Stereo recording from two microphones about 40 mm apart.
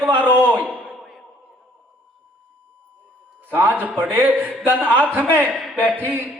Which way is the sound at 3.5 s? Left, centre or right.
Right.